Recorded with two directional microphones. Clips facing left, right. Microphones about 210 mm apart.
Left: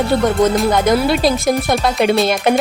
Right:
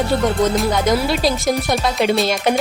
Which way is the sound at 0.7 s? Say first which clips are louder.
Left 3 dB; 55° left (ahead or behind).